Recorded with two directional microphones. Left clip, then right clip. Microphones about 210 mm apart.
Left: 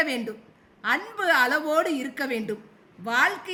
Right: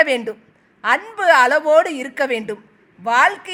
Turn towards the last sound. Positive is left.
turn(degrees=-30)  # may be behind; listen again after turning